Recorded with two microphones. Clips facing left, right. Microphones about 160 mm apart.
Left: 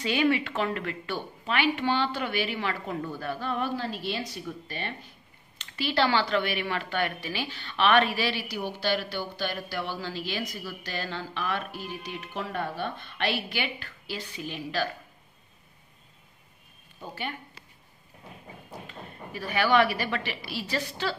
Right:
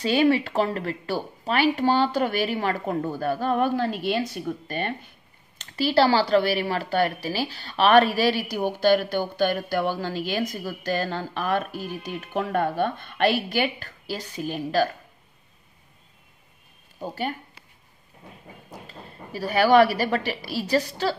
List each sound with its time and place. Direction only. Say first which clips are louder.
0.0 s speech: right 5 dB; 35° right (ahead or behind)
5.6 s a woman's voice: right 6 dB; 40° right (ahead or behind)
17.0 s speech: right 7 dB; 40° right (ahead or behind)
18.9 s speech: right 1 dB; 35° right (ahead or behind)